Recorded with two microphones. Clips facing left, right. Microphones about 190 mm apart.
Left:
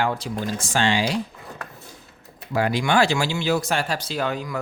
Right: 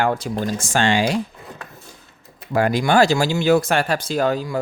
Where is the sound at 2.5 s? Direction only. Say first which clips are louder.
Right 4 dB; 45° right (ahead or behind).